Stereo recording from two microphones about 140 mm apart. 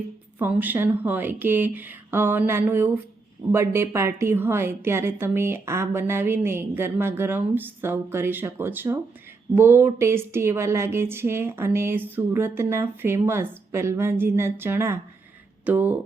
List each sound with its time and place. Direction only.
0.3 s a woman's voice: 15° right (ahead or behind)